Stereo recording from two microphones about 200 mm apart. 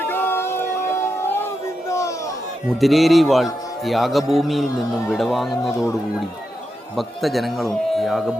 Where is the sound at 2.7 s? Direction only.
Centre (ahead or behind).